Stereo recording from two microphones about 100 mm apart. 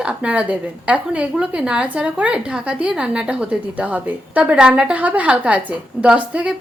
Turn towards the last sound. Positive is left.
turn(degrees=-10)  # may be behind; listen again after turning